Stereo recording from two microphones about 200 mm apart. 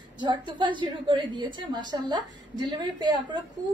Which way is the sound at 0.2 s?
25° right (ahead or behind).